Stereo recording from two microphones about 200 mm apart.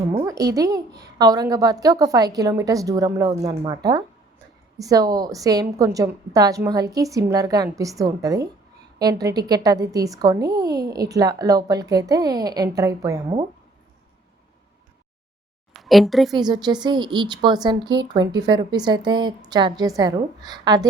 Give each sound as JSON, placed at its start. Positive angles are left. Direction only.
{"t": 0.2, "sound": "a child's voice", "side_deg": -20}
{"t": 15.7, "sound": "speech", "side_deg": 0}
{"t": 16.4, "sound": "a woman's voice", "side_deg": -20}